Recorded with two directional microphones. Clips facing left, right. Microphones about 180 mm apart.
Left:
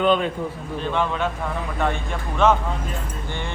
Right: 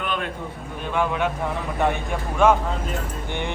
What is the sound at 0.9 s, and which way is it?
Speech, 10° right (ahead or behind).